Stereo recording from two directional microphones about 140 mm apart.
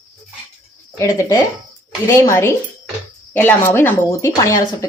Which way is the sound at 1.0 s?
20° left (ahead or behind).